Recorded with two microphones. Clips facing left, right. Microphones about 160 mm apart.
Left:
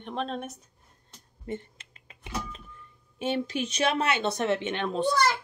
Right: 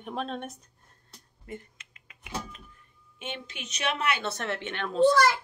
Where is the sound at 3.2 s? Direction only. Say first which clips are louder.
Left 11 dB; 35° left (ahead or behind).